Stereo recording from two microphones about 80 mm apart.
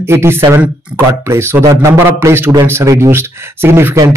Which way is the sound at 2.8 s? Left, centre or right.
Right.